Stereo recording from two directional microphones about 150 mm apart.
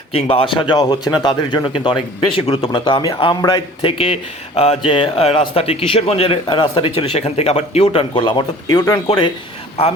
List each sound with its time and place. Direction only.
0.1 s speech: 40° left (ahead or behind)
3.8 s speech: 40° left (ahead or behind)
8.7 s speech: 20° left (ahead or behind)
9.0 s speech: 35° left (ahead or behind)